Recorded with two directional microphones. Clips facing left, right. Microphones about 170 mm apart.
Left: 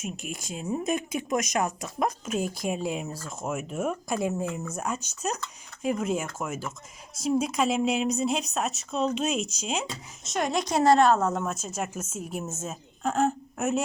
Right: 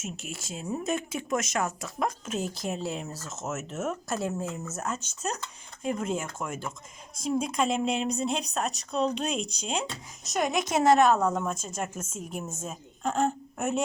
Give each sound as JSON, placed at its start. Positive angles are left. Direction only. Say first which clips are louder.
{"t": 0.0, "sound": "speech", "louder": "left 3 dB", "side_deg": 15}
{"t": 10.6, "sound": "a woman's voice", "louder": "left 1 dB", "side_deg": -20}
{"t": 11.4, "sound": "a woman's voice", "louder": "left 1 dB", "side_deg": 5}